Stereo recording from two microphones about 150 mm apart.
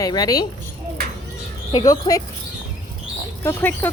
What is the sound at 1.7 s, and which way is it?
Speech, 25° left (ahead or behind).